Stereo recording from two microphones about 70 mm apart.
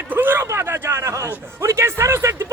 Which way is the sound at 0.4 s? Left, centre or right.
Right.